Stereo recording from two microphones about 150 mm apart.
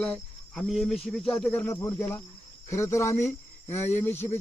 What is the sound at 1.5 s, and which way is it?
A man's voice, 15° left (ahead or behind).